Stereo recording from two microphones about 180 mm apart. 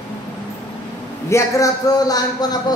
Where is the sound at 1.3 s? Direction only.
15° left (ahead or behind).